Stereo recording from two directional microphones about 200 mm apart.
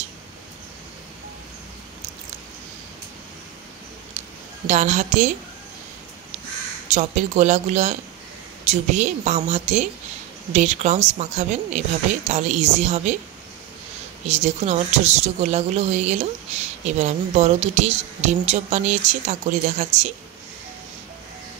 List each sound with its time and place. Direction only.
4.6 s speech: 35° right (ahead or behind)
6.9 s speech: 35° right (ahead or behind)
14.2 s speech: 35° right (ahead or behind)